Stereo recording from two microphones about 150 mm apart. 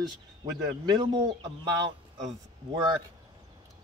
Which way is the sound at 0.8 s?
25° right (ahead or behind).